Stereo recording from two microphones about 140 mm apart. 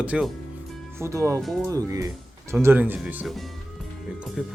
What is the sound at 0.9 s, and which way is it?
Speech, 20° right (ahead or behind).